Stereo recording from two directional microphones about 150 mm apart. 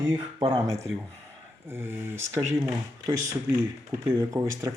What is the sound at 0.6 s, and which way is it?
Speech, 20° right (ahead or behind).